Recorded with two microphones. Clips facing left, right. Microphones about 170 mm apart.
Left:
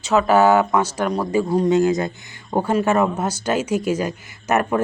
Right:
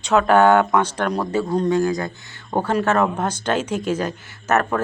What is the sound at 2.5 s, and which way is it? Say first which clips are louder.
Speech: left 1 dB; 10° left (ahead or behind).